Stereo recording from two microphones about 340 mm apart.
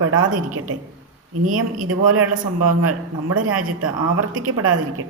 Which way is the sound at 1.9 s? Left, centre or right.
Right.